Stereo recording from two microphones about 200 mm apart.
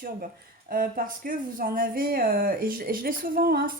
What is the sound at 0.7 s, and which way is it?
Speech, 45° right (ahead or behind).